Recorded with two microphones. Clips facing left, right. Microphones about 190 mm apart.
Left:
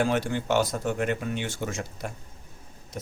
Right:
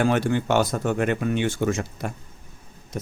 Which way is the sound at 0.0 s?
65° right (ahead or behind).